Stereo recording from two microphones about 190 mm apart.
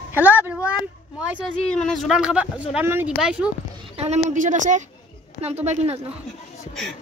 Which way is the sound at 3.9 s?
35° right (ahead or behind).